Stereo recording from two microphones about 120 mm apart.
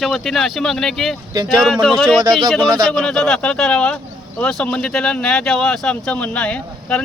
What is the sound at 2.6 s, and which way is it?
Speech, 35° right (ahead or behind).